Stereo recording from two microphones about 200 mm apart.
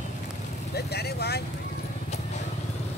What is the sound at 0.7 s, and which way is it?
Speech, 55° left (ahead or behind).